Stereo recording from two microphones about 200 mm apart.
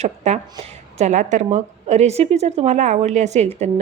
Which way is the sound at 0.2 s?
35° right (ahead or behind).